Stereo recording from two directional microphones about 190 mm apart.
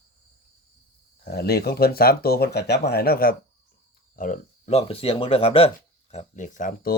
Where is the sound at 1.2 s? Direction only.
55° left (ahead or behind).